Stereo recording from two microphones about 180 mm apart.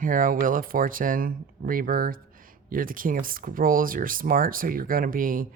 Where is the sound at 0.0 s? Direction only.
50° right (ahead or behind).